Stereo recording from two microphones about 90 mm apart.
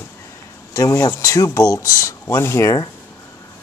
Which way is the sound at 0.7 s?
35° left (ahead or behind).